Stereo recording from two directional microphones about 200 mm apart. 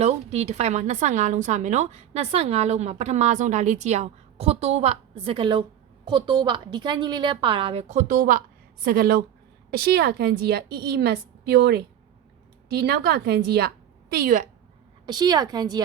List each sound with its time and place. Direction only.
0.0 s a woman's voice: 30° right (ahead or behind)
15.0 s a woman's voice: 20° right (ahead or behind)